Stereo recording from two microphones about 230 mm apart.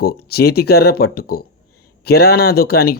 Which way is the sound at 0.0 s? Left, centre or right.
Left.